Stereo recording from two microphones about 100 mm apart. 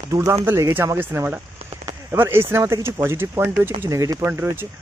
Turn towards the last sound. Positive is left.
turn(degrees=-30)  # may be behind; listen again after turning